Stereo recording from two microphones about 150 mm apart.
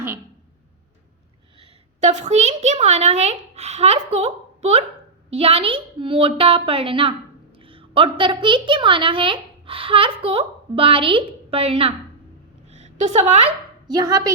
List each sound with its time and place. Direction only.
2.0 s a child's voice: 50° right (ahead or behind)
12.6 s a sound: 45° right (ahead or behind)
13.8 s a woman's voice: 25° right (ahead or behind)